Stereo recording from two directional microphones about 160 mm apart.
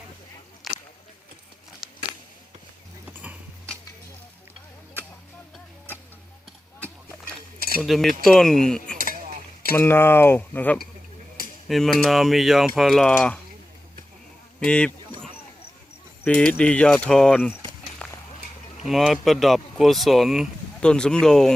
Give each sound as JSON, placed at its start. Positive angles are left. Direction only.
{"t": 0.6, "sound": "a sound", "side_deg": 0}
{"t": 3.1, "sound": "a sound", "side_deg": -10}
{"t": 7.8, "sound": "speech", "side_deg": 0}
{"t": 9.0, "sound": "stir", "side_deg": -60}
{"t": 9.7, "sound": "speech", "side_deg": 15}
{"t": 11.7, "sound": "speech", "side_deg": 0}
{"t": 14.6, "sound": "speech", "side_deg": 5}
{"t": 16.2, "sound": "speech", "side_deg": 10}
{"t": 18.0, "sound": "a sound", "side_deg": 10}
{"t": 18.9, "sound": "speech", "side_deg": 0}